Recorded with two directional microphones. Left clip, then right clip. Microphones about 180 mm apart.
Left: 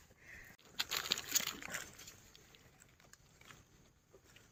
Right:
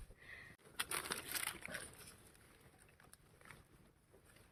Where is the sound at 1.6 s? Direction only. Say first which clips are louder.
Left 3 dB; 55° left (ahead or behind).